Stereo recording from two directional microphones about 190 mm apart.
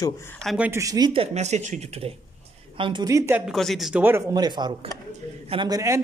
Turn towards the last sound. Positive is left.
turn(degrees=-15)  # may be behind; listen again after turning